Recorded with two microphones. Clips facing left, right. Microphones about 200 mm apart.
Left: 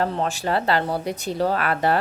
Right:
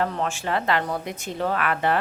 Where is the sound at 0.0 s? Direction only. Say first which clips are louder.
Left 2 dB; 35° left (ahead or behind).